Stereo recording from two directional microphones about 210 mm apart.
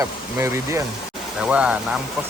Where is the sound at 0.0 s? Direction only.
15° right (ahead or behind).